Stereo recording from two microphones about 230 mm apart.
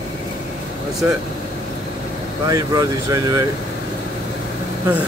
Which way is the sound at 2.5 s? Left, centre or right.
Centre.